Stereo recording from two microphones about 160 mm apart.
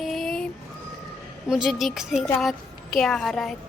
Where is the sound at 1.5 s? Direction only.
Centre (ahead or behind).